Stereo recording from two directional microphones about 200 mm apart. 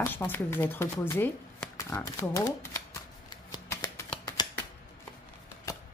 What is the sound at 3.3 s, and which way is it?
Shuffling cards, 20° left (ahead or behind).